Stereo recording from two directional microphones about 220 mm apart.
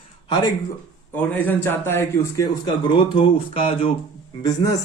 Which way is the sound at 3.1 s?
25° left (ahead or behind).